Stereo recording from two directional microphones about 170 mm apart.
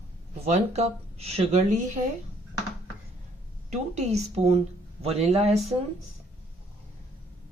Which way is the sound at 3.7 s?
40° right (ahead or behind).